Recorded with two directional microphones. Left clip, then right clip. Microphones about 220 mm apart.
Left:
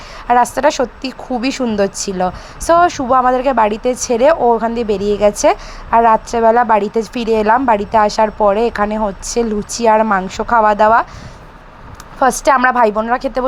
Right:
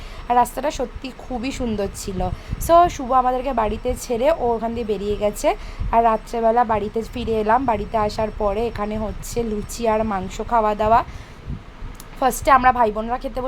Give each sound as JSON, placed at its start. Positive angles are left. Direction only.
{"t": 0.3, "sound": "a woman's voice", "side_deg": 25}
{"t": 12.2, "sound": "a woman's voice", "side_deg": 20}